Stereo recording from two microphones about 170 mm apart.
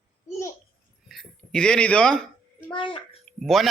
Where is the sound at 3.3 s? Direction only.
Centre (ahead or behind).